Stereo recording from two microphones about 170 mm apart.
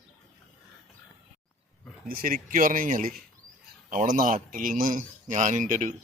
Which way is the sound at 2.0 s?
60° right (ahead or behind).